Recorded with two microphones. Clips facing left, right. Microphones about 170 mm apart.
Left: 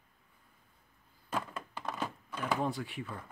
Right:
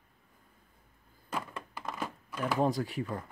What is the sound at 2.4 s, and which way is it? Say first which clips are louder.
Speech: right 4 dB; 40° right (ahead or behind).